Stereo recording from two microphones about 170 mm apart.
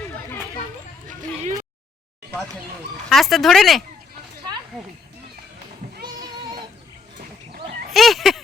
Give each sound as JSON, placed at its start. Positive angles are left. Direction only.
{"t": 3.1, "sound": "speech", "side_deg": 0}
{"t": 6.1, "sound": "child singing", "side_deg": -25}
{"t": 7.9, "sound": "a sound", "side_deg": 0}